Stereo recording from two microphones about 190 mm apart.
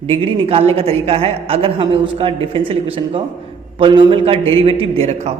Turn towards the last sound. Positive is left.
turn(degrees=-35)  # may be behind; listen again after turning